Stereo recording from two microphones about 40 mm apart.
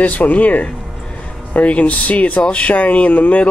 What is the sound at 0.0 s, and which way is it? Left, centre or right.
Speech, left.